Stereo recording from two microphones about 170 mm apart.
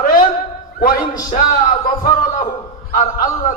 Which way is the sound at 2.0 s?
50° left (ahead or behind).